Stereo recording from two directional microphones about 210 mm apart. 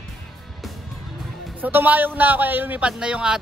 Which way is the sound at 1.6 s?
10° right (ahead or behind).